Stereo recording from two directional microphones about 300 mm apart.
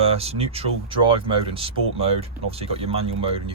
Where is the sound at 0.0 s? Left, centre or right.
Centre.